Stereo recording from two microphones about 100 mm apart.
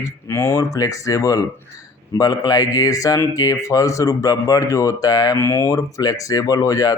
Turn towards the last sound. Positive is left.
turn(degrees=35)  # may be behind; listen again after turning